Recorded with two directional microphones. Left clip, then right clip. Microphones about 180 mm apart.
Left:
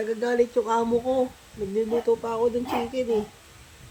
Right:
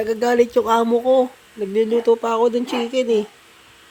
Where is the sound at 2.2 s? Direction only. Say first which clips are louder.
Right 7 dB; 35° right (ahead or behind).